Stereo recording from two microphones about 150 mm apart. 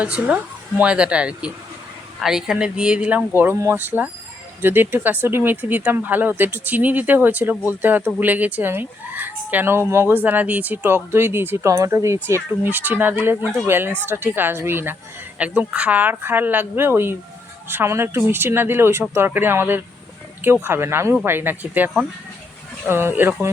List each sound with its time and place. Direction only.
0.0 s speech: 10° right (ahead or behind)